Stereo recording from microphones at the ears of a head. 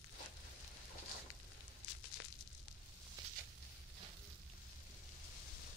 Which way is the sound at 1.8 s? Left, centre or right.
Left.